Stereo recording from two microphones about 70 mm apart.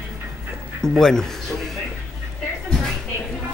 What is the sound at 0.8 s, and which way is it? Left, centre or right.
Speech, centre.